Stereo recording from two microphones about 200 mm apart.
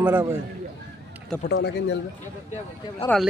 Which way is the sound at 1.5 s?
65° left (ahead or behind).